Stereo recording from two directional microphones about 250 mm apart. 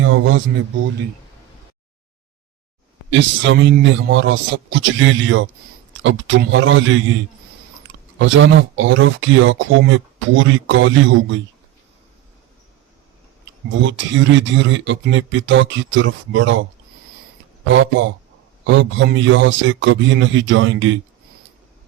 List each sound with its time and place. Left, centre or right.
0.0 s speech: right
3.1 s speech: right
8.2 s speech: right
13.7 s speech: right
17.7 s speech: right